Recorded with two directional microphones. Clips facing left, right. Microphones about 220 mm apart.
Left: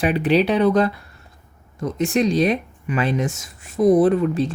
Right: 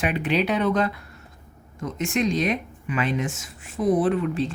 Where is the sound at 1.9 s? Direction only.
35° left (ahead or behind).